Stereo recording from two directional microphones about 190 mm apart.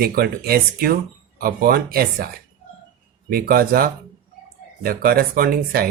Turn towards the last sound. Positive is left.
turn(degrees=-50)  # may be behind; listen again after turning